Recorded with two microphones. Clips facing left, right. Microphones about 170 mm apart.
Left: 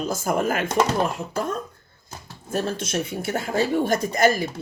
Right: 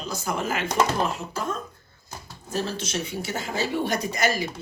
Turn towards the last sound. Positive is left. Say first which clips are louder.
# left 5 dB
turn(degrees=50)  # may be behind; listen again after turning